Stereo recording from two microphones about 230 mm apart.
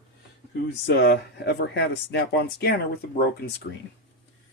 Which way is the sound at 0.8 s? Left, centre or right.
Left.